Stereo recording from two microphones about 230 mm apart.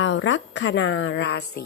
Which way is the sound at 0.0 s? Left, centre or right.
Left.